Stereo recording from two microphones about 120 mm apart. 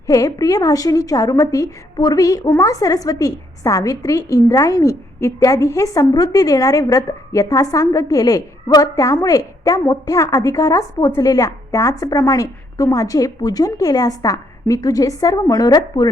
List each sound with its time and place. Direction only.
0.1 s a woman's voice: 30° left (ahead or behind)